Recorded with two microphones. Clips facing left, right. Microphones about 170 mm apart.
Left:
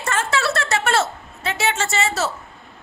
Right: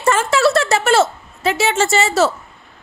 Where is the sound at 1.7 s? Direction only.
90° right.